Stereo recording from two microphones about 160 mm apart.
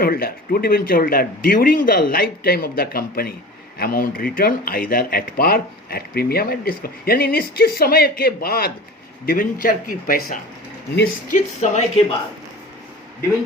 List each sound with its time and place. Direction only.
0.0 s speech: 70° left (ahead or behind)
11.3 s speech: 45° left (ahead or behind)